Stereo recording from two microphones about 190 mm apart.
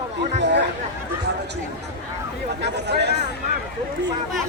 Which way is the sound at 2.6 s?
60° right (ahead or behind).